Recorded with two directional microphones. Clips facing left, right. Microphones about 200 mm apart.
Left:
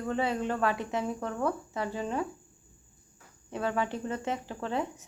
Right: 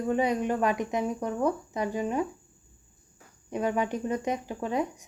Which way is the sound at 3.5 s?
15° right (ahead or behind).